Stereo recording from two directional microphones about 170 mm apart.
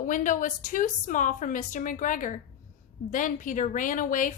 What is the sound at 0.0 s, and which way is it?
A woman's voice, 50° left (ahead or behind).